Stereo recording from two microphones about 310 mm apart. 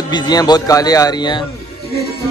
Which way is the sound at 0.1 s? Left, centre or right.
Centre.